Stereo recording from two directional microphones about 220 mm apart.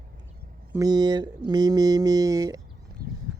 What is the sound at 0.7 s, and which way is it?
Speech, 15° right (ahead or behind).